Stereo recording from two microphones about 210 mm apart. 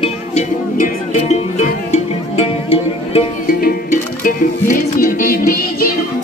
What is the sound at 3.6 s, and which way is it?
Music, 40° left (ahead or behind).